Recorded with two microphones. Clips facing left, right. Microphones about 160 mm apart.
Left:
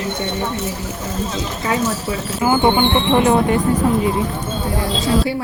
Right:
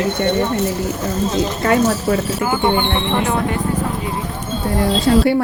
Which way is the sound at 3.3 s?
25° left (ahead or behind).